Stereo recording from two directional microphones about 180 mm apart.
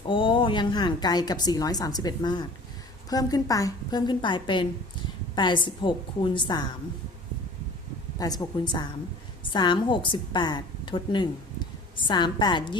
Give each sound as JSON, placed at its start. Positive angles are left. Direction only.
{"t": 0.1, "sound": "a woman's voice", "side_deg": 30}
{"t": 8.2, "sound": "a woman's voice", "side_deg": 20}